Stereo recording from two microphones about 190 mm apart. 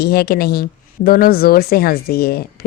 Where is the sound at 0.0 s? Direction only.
55° left (ahead or behind).